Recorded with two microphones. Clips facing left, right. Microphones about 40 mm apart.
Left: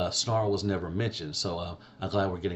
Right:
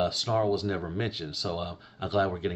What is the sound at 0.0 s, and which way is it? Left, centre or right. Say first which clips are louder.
Speech: right 2 dB; centre.